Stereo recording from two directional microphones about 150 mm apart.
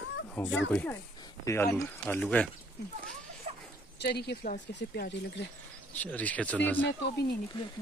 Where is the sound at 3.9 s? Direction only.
90° left.